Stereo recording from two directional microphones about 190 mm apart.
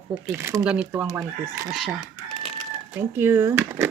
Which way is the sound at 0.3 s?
15° right (ahead or behind).